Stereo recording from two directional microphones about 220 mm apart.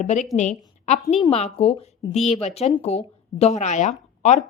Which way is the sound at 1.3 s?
30° left (ahead or behind).